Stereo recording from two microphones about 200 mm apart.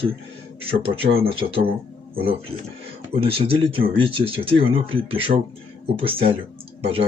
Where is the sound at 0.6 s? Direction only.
30° right (ahead or behind).